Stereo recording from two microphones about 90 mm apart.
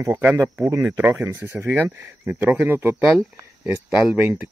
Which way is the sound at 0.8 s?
15° right (ahead or behind).